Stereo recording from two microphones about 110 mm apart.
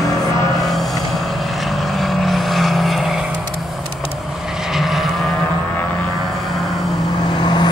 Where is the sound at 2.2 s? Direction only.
Centre (ahead or behind).